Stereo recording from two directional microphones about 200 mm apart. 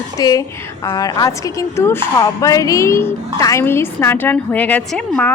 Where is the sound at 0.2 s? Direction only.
20° left (ahead or behind).